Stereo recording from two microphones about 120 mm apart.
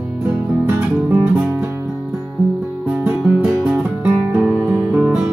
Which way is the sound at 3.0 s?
15° right (ahead or behind).